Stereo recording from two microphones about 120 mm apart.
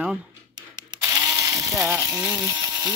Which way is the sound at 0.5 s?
35° right (ahead or behind).